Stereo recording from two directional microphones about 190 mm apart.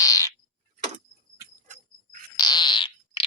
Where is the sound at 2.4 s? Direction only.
25° left (ahead or behind).